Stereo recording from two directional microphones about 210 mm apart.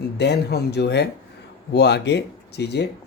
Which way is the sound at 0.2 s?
50° left (ahead or behind).